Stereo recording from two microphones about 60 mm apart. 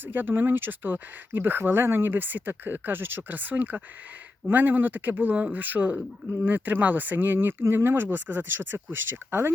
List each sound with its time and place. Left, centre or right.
0.0 s speech: right